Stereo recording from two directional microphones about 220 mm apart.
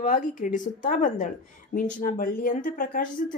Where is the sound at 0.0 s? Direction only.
35° left (ahead or behind).